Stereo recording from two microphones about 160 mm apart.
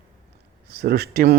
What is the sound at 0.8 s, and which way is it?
Speech, 75° right (ahead or behind).